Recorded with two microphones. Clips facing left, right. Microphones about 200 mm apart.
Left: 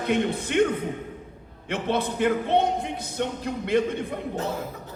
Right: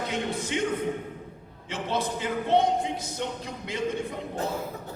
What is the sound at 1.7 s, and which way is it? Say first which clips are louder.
Speech: left 3 dB; 60° left (ahead or behind).